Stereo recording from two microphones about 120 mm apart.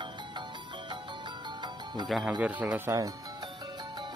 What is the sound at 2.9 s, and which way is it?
Music, 35° right (ahead or behind).